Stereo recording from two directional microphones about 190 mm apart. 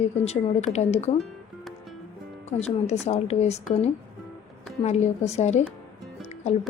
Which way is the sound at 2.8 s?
35° left (ahead or behind).